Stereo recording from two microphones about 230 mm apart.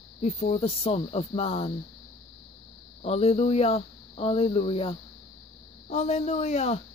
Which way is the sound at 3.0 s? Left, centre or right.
Left.